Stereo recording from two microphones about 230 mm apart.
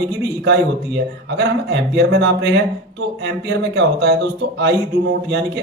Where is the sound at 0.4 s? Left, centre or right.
Right.